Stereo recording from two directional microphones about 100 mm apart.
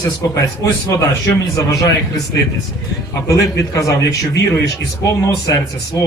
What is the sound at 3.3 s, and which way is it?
A man's voice, 35° left (ahead or behind).